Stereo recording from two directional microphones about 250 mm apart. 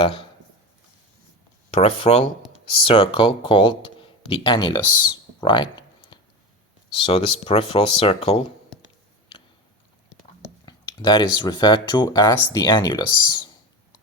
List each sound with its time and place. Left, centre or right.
1.7 s speech: left
10.7 s speech: centre